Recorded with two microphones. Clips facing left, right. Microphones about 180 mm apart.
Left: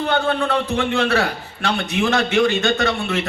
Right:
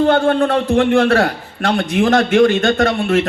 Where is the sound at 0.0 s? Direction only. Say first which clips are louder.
Right 7 dB; 45° right (ahead or behind).